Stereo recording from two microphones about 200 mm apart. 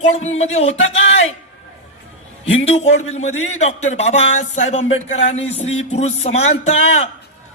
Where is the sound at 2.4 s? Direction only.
30° left (ahead or behind).